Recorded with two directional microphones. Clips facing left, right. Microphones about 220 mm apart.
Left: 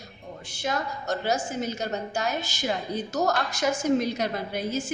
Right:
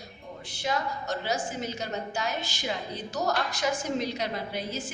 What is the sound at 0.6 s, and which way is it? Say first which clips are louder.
A woman's voice: left 2 dB; 45° left (ahead or behind).